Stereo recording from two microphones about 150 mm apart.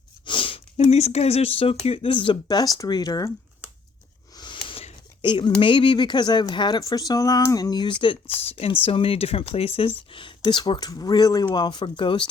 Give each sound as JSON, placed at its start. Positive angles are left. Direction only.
{"t": 0.3, "sound": "sniff", "side_deg": 35}
{"t": 1.8, "sound": "speech", "side_deg": 40}
{"t": 4.4, "sound": "a sound", "side_deg": 30}
{"t": 5.5, "sound": "speech", "side_deg": 35}
{"t": 8.4, "sound": "speech", "side_deg": 40}